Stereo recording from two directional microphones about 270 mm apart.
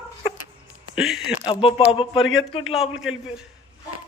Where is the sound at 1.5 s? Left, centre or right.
Centre.